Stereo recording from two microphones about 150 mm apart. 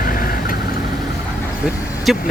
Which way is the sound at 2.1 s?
Centre (ahead or behind).